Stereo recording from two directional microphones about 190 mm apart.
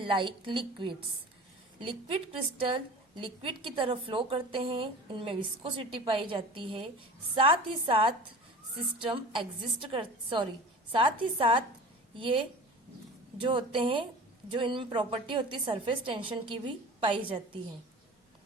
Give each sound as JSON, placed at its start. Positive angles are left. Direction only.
{"t": 0.0, "sound": "a woman's voice", "side_deg": -25}
{"t": 13.4, "sound": "a woman's voice", "side_deg": -25}